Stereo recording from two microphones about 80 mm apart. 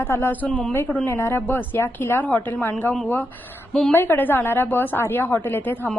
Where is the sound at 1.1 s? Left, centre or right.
Left.